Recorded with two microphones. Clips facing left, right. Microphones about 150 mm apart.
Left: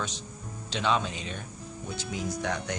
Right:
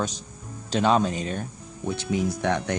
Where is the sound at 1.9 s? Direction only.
60° right (ahead or behind).